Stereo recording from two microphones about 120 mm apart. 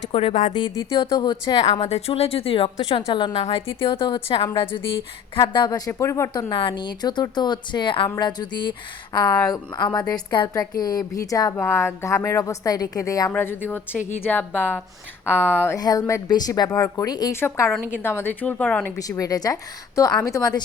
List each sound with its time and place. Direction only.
0.1 s a woman's voice: 55° left (ahead or behind)
0.5 s a woman's voice: 35° left (ahead or behind)
1.8 s a woman's voice: 60° left (ahead or behind); by 3.3 s 40° left (ahead or behind)
3.3 s a woman's voice: 55° left (ahead or behind)
3.8 s a woman's voice: 40° left (ahead or behind)
5.4 s a woman's voice: 35° left (ahead or behind)
5.9 s a woman's voice: 25° left (ahead or behind)
6.5 s a woman's voice: 45° left (ahead or behind); by 15.5 s 15° left (ahead or behind)
15.6 s a woman's voice: 30° left (ahead or behind)
17.4 s a woman's voice: 20° left (ahead or behind)
18.9 s a woman's voice: 30° left (ahead or behind)